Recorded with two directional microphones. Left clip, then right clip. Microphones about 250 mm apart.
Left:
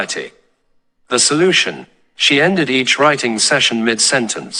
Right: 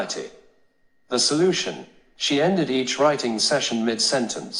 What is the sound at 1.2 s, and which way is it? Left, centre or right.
Speech, left.